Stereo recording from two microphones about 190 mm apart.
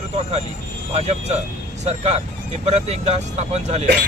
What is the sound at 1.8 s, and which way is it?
Speech, 35° right (ahead or behind).